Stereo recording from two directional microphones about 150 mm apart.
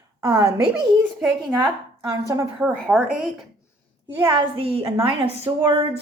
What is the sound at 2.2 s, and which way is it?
Speech, 20° right (ahead or behind).